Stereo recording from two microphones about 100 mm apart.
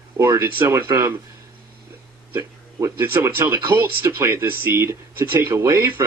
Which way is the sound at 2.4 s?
25° right (ahead or behind).